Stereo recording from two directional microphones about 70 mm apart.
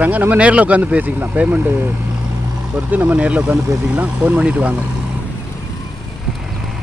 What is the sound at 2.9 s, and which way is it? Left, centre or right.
Speech, right.